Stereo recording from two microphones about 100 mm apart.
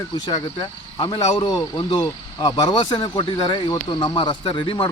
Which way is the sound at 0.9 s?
45° left (ahead or behind).